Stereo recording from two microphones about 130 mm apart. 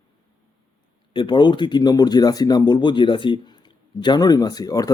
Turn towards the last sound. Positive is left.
turn(degrees=30)  # may be behind; listen again after turning